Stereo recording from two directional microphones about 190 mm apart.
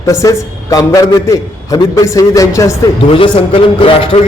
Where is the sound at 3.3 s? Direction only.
30° left (ahead or behind).